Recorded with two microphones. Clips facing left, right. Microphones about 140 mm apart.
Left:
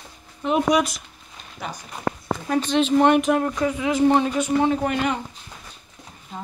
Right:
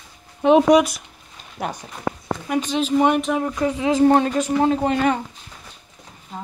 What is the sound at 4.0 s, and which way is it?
Speech, 45° right (ahead or behind).